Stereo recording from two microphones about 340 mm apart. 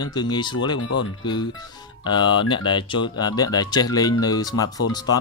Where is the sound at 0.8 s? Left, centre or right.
Left.